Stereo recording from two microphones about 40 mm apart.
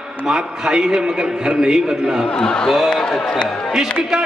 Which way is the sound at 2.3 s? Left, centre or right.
Centre.